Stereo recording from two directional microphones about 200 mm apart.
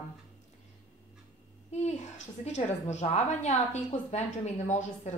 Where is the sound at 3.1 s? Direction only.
35° left (ahead or behind).